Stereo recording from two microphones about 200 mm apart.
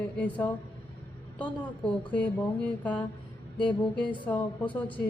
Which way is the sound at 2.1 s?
5° left (ahead or behind).